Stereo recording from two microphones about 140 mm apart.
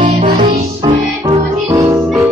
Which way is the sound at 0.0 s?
50° right (ahead or behind).